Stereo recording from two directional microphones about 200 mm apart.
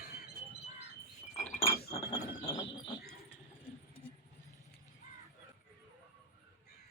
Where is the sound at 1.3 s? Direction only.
35° left (ahead or behind).